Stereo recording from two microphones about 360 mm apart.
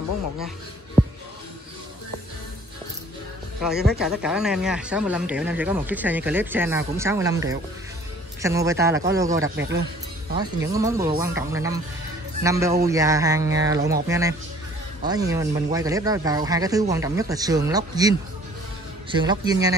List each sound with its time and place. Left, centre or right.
3.6 s speech: centre
9.6 s speech: right
10.3 s speech: centre